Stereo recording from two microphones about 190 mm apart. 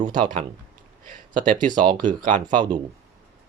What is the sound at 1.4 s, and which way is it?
Speech, 45° right (ahead or behind).